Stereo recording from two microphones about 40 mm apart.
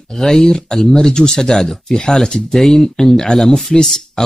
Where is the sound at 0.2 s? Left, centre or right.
Centre.